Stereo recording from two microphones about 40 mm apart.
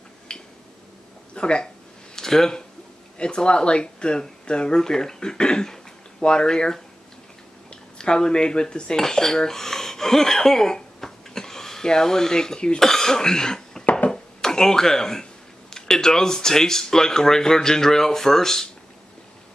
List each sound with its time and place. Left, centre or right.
0.3 s finger snapping: left
1.3 s speech: left
2.1 s speech: centre
3.2 s speech: left
8.0 s speech: centre
8.9 s speech: centre
12.8 s cough: centre
14.1 s a sound: centre
15.7 s speech: centre